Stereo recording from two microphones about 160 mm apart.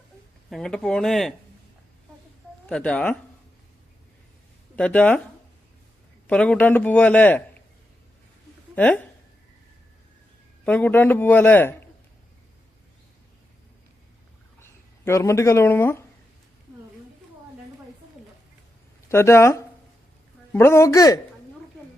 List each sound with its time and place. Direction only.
0.5 s speech: 5° left (ahead or behind)
2.6 s speech: 5° left (ahead or behind)
4.8 s a man's voice: 10° left (ahead or behind)
6.2 s a man's voice: 5° left (ahead or behind)
8.7 s speech: 10° left (ahead or behind)
10.7 s a man's voice: 10° left (ahead or behind)
14.6 s speech: 15° left (ahead or behind)
19.0 s a man's voice: 15° left (ahead or behind)